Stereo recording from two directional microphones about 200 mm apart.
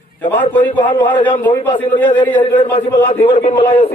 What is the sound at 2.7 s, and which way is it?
A man's voice, 30° left (ahead or behind).